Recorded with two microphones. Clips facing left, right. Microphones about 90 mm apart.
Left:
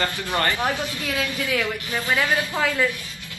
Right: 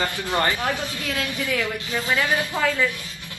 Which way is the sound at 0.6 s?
20° left (ahead or behind).